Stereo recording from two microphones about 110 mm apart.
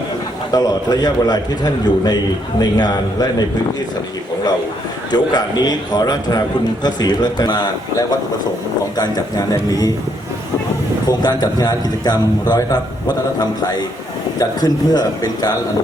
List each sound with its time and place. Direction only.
0.5 s a man's voice: 35° left (ahead or behind)
5.1 s a man's voice: 40° left (ahead or behind)
11.2 s a man's voice: 40° left (ahead or behind)
14.3 s a man's voice: 35° left (ahead or behind)